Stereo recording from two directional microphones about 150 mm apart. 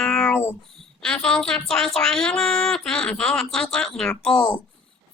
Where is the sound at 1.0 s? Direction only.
5° left (ahead or behind).